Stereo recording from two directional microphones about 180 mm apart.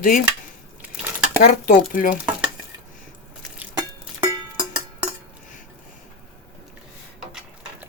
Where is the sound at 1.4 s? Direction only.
50° left (ahead or behind).